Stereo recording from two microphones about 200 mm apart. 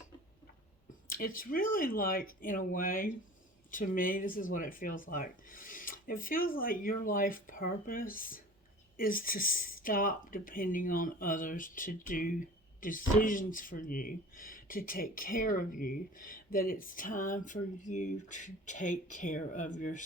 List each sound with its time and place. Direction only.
1.1 s speech: 45° left (ahead or behind)